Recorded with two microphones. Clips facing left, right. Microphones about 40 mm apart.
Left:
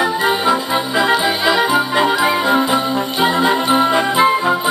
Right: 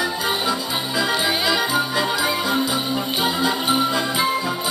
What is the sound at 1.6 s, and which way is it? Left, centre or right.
Music, left.